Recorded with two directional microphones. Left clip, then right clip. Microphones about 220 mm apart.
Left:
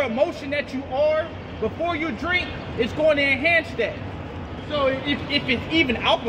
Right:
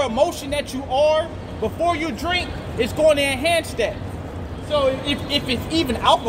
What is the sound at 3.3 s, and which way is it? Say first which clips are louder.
Speech: left 1 dB; 70° right (ahead or behind).